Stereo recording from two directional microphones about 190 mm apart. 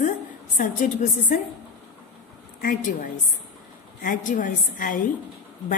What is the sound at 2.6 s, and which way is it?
Speech, 45° left (ahead or behind).